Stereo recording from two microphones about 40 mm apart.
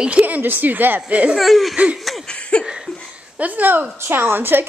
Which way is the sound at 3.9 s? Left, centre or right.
Right.